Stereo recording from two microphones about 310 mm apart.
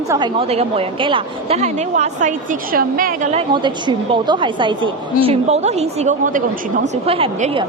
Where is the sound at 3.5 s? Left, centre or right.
Centre.